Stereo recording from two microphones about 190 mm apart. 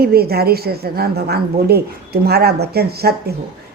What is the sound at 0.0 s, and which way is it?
Speech, 55° right (ahead or behind).